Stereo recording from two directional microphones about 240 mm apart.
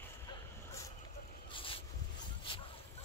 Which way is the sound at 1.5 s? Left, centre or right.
Left.